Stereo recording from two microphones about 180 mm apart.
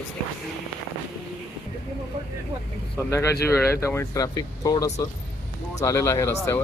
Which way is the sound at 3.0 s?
15° left (ahead or behind).